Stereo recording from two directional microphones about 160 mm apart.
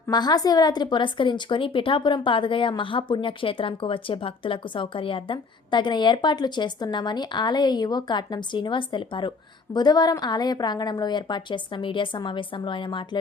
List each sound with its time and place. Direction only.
0.1 s a woman's voice: 25° left (ahead or behind)